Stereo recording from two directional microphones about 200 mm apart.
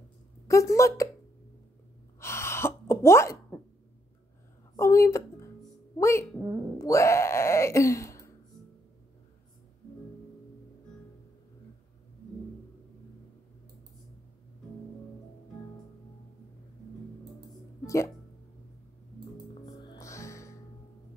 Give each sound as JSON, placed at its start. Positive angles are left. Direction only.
{"t": 0.5, "sound": "a woman's voice", "side_deg": 15}
{"t": 2.1, "sound": "gasp", "side_deg": 15}
{"t": 4.7, "sound": "a woman's voice", "side_deg": 15}
{"t": 17.8, "sound": "speech", "side_deg": 15}
{"t": 19.6, "sound": "music", "side_deg": 20}